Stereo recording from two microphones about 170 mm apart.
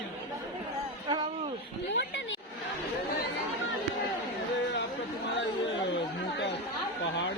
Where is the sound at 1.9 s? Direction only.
90° left.